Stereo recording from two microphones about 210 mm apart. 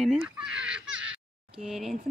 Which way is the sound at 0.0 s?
5° right (ahead or behind).